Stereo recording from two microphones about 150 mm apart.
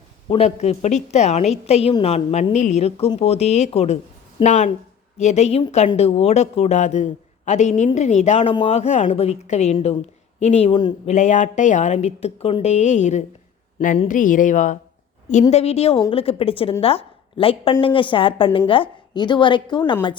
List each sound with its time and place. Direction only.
0.3 s a woman's voice: 45° left (ahead or behind)
11.1 s a woman's voice: 55° left (ahead or behind); by 20.1 s 30° left (ahead or behind)